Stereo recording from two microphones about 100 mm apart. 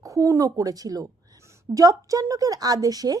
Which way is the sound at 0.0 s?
35° right (ahead or behind).